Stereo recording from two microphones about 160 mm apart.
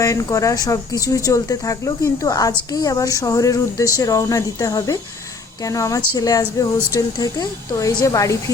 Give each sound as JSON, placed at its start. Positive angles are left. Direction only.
{"t": 0.0, "sound": "speech", "side_deg": 20}